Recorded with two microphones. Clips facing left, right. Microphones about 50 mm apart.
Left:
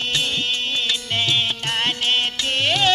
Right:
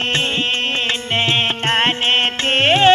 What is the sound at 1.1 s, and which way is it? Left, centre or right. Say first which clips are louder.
Music: right 5 dB; right.